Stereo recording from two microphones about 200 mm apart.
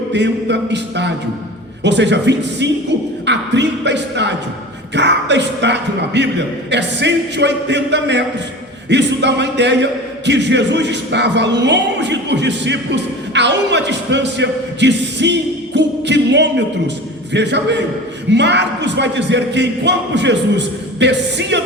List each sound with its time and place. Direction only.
0.1 s speech: 60° right (ahead or behind)